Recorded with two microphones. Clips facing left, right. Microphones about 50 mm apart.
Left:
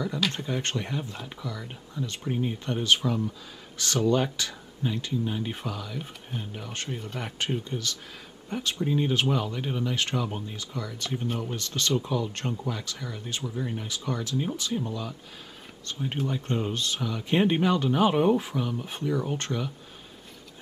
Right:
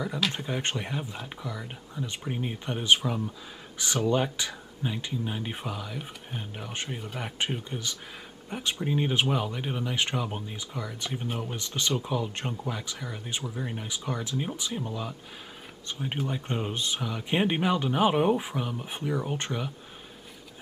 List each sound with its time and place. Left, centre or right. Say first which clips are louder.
0.0 s speech: left 1 dB; centre